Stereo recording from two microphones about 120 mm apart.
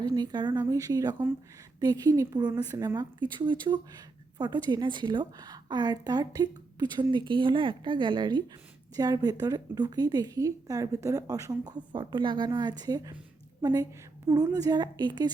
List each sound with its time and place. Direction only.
0.0 s a woman's voice: 35° right (ahead or behind)